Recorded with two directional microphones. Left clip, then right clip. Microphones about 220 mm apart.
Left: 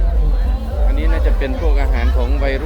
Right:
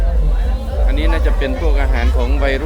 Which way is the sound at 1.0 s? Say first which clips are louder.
Right 3 dB; 15° right (ahead or behind).